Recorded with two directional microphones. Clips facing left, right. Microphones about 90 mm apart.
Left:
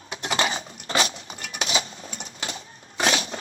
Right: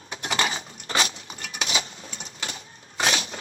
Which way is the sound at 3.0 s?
30° left (ahead or behind).